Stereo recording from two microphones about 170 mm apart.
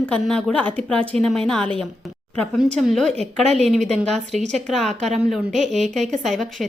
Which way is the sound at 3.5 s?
Centre (ahead or behind).